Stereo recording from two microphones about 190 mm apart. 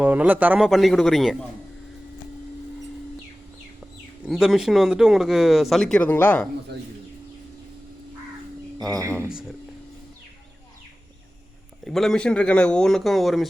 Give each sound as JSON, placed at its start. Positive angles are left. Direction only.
{"t": 0.0, "sound": "speech", "side_deg": -10}
{"t": 4.3, "sound": "speech", "side_deg": 0}
{"t": 8.9, "sound": "speech", "side_deg": -15}
{"t": 9.3, "sound": "speech", "side_deg": -5}
{"t": 11.9, "sound": "speech", "side_deg": 0}